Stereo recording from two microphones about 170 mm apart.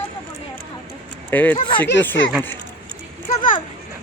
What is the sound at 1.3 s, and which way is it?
Speech, 10° left (ahead or behind).